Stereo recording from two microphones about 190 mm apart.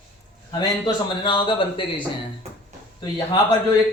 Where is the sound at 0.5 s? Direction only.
25° left (ahead or behind).